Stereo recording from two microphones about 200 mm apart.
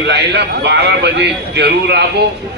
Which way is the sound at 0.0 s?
60° right (ahead or behind).